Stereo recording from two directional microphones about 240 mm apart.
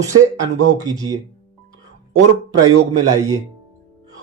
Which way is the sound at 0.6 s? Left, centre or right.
Right.